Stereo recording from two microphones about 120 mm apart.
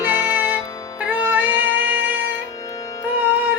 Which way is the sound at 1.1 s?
15° right (ahead or behind).